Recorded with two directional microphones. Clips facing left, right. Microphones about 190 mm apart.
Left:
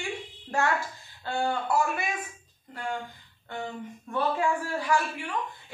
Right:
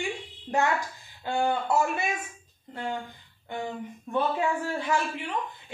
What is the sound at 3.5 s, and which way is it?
A woman's voice, 15° right (ahead or behind).